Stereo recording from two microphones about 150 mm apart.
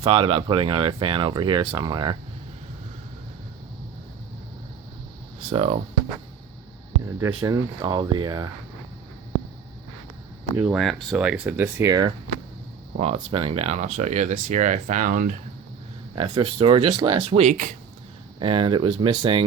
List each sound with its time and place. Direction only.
0.0 s speech: 35° right (ahead or behind)
5.5 s speech: 45° right (ahead or behind)
7.2 s speech: 20° right (ahead or behind)
10.6 s speech: centre (ahead or behind); by 12.1 s 25° right (ahead or behind)
13.0 s speech: 45° right (ahead or behind); by 15.4 s 65° right (ahead or behind)
16.1 s speech: 35° right (ahead or behind)
17.4 s speech: 55° right (ahead or behind)
18.3 s speech: 35° right (ahead or behind)